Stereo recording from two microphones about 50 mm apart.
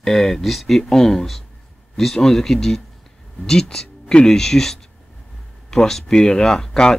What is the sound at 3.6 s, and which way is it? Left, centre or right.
Speech, centre.